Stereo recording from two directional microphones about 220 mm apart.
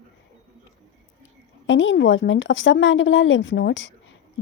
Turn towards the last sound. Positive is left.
turn(degrees=60)  # may be behind; listen again after turning